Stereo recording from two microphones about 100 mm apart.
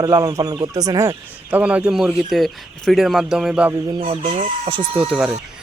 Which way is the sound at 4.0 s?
65° right (ahead or behind).